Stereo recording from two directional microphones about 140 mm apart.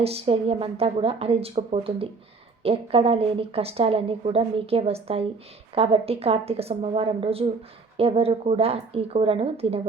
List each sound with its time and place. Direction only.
0.0 s a woman's voice: 45° right (ahead or behind)